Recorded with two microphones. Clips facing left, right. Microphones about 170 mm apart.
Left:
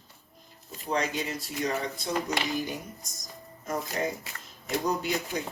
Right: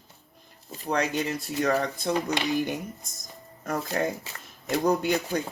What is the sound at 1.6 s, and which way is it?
Speech, 65° right (ahead or behind).